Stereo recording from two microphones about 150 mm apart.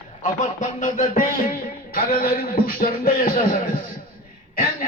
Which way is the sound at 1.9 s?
80° left.